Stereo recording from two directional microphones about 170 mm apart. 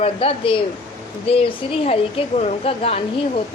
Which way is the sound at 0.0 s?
35° left (ahead or behind).